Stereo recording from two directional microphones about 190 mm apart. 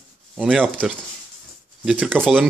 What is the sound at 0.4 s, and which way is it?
A man's voice, 5° right (ahead or behind).